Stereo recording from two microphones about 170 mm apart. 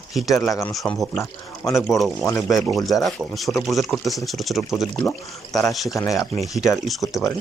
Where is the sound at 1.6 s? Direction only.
15° left (ahead or behind).